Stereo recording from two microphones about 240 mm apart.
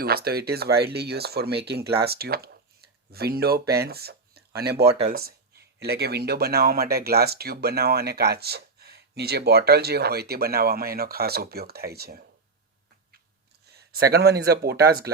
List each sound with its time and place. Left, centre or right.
0.0 s speech: right
13.7 s a sound: right
14.1 s speech: right